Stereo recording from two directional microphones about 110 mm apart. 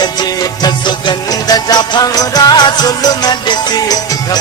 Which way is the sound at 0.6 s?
40° left (ahead or behind).